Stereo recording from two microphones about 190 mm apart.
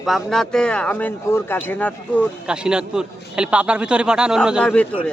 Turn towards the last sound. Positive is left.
turn(degrees=5)  # may be behind; listen again after turning